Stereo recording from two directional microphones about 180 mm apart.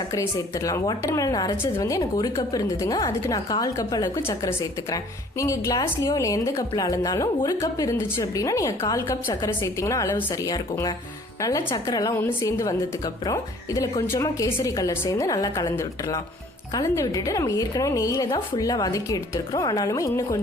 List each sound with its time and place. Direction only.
0.1 s a woman's voice: 20° left (ahead or behind)